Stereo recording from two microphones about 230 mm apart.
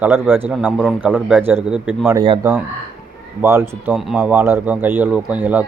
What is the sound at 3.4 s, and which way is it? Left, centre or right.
A man's voice, centre.